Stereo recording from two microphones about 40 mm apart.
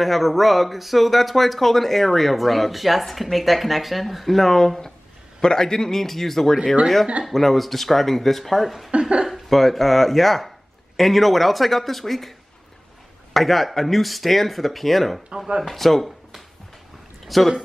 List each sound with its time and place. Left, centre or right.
0.0 s a man's voice: centre
15.3 s speech: centre
15.6 s speech: centre
17.3 s speech: centre